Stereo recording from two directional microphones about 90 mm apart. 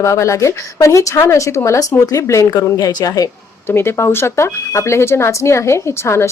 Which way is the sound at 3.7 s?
25° left (ahead or behind).